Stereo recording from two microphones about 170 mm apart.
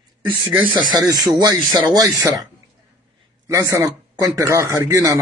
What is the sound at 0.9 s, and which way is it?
Speech, 20° right (ahead or behind).